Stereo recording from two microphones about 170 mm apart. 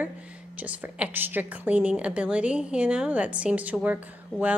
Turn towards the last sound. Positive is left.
turn(degrees=-10)  # may be behind; listen again after turning